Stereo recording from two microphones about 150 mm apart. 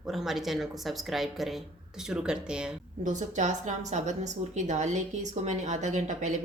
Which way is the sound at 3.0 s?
55° right (ahead or behind).